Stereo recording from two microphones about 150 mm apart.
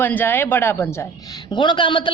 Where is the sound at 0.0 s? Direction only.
15° left (ahead or behind).